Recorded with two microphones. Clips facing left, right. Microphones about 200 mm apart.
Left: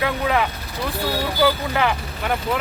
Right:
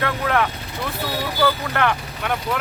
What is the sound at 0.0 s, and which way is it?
Speech, 5° left (ahead or behind).